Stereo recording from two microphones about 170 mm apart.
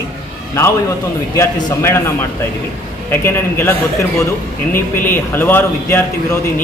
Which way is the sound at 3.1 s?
15° left (ahead or behind).